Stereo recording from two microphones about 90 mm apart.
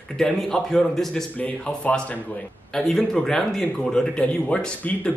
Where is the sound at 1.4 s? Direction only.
15° left (ahead or behind).